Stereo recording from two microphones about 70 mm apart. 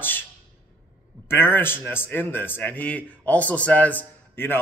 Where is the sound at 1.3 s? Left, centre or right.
Left.